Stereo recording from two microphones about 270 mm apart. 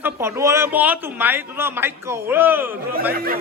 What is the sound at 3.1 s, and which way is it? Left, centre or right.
Speech, right.